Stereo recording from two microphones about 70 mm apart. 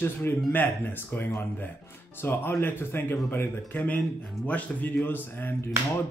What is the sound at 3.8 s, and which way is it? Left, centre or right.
Speech, centre.